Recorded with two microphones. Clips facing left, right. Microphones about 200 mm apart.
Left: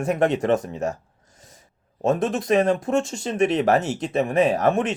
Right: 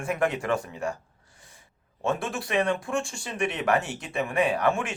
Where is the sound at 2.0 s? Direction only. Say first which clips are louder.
Left 7 dB; 40° left (ahead or behind).